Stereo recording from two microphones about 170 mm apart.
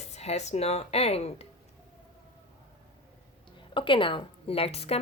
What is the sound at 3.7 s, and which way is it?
A woman's voice, 30° left (ahead or behind).